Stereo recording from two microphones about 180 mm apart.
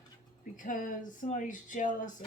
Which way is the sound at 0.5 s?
45° left (ahead or behind).